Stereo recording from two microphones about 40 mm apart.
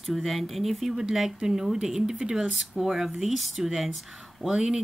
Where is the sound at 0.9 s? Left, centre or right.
Centre.